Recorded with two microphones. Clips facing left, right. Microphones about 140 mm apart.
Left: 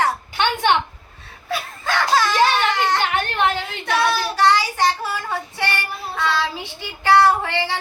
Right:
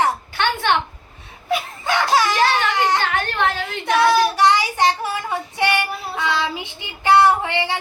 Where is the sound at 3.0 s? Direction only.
15° left (ahead or behind).